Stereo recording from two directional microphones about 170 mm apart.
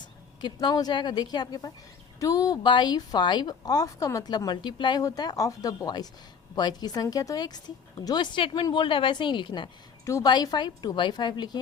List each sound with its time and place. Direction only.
0.4 s a woman's voice: 25° left (ahead or behind)